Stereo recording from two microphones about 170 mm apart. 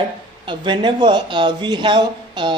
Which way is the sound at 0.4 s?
25° right (ahead or behind).